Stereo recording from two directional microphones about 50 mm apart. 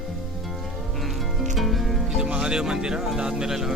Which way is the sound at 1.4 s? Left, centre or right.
Centre.